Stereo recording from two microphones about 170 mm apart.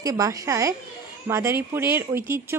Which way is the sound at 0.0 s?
20° right (ahead or behind).